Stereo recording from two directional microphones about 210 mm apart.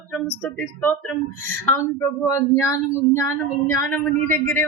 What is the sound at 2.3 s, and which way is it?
A woman's voice, 15° left (ahead or behind).